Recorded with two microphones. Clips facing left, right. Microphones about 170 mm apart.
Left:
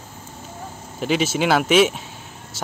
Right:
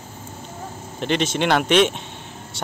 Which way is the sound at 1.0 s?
5° left (ahead or behind).